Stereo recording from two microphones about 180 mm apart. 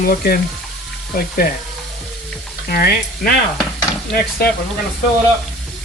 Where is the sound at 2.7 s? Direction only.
55° left (ahead or behind).